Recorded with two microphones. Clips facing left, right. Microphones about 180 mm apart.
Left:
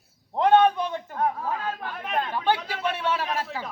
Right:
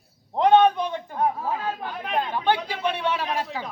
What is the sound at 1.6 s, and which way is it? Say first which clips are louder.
Chatter: right 2 dB; 15° right (ahead or behind).